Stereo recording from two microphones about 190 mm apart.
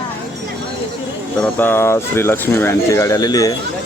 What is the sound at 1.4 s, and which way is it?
Speech, 10° left (ahead or behind).